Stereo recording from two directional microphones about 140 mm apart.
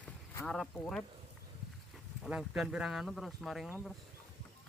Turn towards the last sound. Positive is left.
turn(degrees=0)  # may be behind; listen again after turning